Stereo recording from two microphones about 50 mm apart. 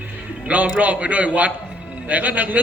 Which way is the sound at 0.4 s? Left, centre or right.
Right.